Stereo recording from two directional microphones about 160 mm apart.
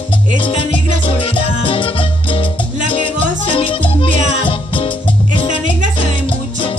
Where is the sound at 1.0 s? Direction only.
35° left (ahead or behind).